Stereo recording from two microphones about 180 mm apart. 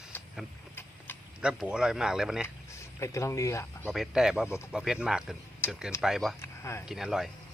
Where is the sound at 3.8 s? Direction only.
Centre (ahead or behind).